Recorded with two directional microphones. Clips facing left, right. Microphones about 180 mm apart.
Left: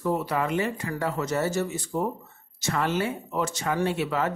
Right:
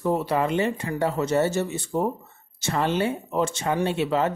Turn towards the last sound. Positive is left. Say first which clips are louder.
# right 3 dB
turn(degrees=-25)  # may be behind; listen again after turning